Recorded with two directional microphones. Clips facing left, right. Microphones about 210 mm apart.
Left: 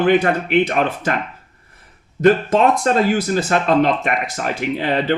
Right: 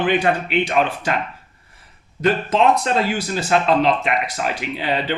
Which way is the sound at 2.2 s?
45° left (ahead or behind).